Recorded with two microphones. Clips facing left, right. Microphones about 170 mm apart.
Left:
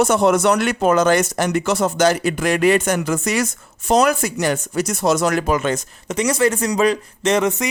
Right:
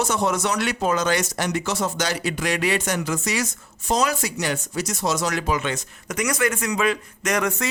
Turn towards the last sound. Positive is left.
turn(degrees=20)  # may be behind; listen again after turning